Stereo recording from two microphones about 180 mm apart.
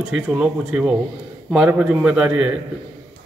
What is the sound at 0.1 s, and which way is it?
Speech, 5° right (ahead or behind).